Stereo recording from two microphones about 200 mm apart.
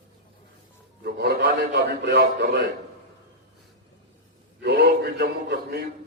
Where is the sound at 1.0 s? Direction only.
55° right (ahead or behind).